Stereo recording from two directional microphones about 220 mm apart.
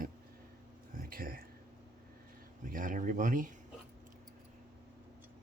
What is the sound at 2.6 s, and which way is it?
Speech, 40° right (ahead or behind).